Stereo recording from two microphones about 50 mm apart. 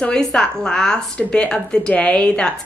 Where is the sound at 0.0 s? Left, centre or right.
Centre.